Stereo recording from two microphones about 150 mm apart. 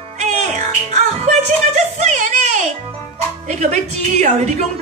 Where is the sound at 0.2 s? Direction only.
45° right (ahead or behind).